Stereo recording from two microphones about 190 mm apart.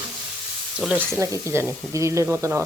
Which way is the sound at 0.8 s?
10° right (ahead or behind).